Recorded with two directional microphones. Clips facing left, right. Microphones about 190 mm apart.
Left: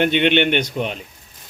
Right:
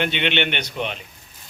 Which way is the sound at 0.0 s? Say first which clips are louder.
Left 6 dB; 50° left (ahead or behind).